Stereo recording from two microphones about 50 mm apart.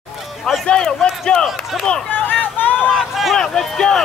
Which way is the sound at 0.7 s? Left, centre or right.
Centre.